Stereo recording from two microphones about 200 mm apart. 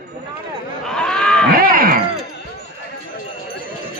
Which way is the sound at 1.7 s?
45° right (ahead or behind).